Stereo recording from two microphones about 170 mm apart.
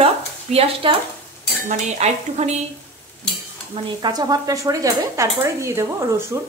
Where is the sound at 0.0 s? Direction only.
35° right (ahead or behind).